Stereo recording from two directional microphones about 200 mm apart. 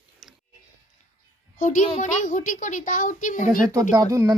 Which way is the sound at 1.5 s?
40° left (ahead or behind).